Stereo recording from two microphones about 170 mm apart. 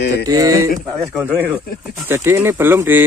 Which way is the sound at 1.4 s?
10° right (ahead or behind).